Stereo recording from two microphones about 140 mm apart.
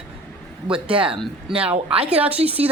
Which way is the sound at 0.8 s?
40° right (ahead or behind).